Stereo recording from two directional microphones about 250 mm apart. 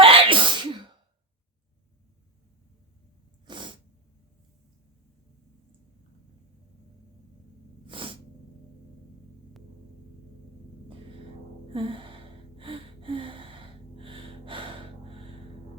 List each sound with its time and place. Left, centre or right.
0.0 s sneeze: right
3.4 s sneeze: centre
7.9 s sneeze: right
11.7 s gasp: right